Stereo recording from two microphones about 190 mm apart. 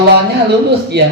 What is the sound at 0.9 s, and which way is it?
Speech, 60° right (ahead or behind).